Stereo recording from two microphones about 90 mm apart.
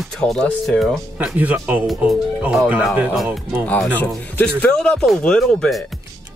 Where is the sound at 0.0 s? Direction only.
5° left (ahead or behind).